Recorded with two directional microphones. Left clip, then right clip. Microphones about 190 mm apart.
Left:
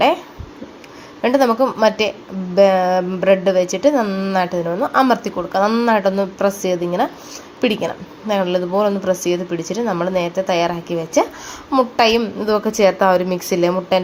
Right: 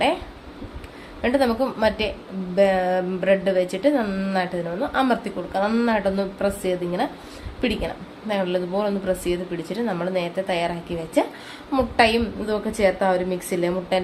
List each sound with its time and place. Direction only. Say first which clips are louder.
1.2 s a woman's voice: left 6 dB; 20° left (ahead or behind)